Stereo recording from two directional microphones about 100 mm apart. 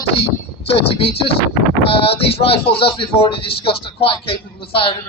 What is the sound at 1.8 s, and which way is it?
A man's voice, 70° left (ahead or behind).